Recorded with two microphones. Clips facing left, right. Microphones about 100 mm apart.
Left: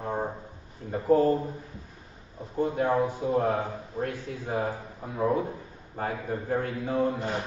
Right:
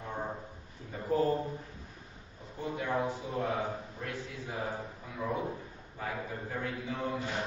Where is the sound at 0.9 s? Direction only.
40° left (ahead or behind).